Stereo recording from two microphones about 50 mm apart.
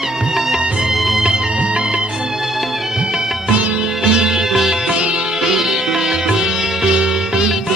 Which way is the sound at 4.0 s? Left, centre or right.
Centre.